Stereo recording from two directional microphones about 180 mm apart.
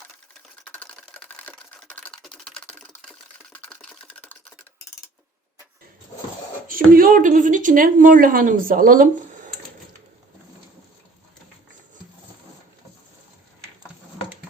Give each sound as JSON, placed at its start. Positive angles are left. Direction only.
{"t": 0.6, "sound": "typewriter", "side_deg": 5}
{"t": 6.7, "sound": "speech", "side_deg": -50}